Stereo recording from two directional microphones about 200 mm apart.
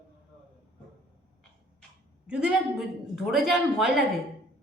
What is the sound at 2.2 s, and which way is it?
A man's voice, 5° right (ahead or behind).